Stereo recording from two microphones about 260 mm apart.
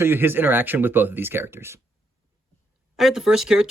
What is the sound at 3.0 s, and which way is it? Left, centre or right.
Speech, centre.